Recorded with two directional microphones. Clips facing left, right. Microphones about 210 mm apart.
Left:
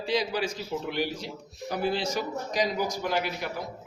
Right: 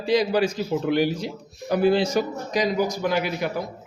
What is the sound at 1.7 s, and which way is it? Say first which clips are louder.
Speech: right 9 dB; 90° right.